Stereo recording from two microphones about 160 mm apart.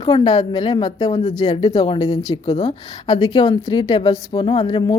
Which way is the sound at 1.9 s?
25° left (ahead or behind).